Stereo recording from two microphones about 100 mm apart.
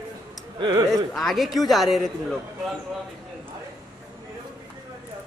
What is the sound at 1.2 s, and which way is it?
Speech, centre (ahead or behind).